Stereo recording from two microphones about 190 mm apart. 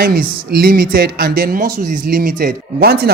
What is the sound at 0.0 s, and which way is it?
Speech, 50° right (ahead or behind).